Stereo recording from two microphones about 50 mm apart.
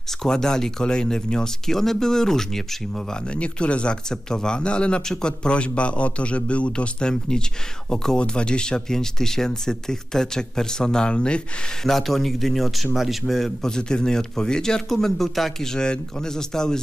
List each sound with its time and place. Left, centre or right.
0.2 s speech: centre
3.3 s speech: left
11.8 s a man's voice: centre
15.7 s speech: centre